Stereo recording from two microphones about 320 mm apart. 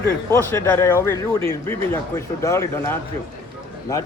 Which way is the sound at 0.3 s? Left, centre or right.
Centre.